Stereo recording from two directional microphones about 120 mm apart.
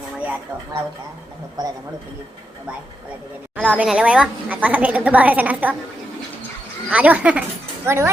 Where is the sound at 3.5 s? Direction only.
10° right (ahead or behind).